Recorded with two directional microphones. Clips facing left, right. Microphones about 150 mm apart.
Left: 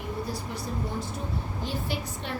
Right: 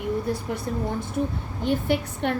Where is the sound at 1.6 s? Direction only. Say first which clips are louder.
Right 11 dB; 60° right (ahead or behind).